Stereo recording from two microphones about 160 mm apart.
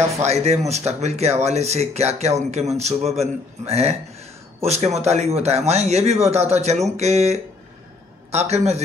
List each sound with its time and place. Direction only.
0.3 s a man's voice: 45° right (ahead or behind)